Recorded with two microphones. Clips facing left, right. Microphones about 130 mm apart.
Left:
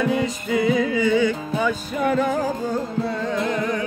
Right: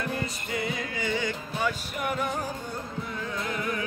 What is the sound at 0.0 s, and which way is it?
Music, 90° left.